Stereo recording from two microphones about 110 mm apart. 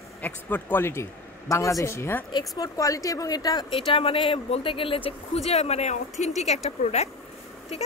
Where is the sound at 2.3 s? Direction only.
40° left (ahead or behind).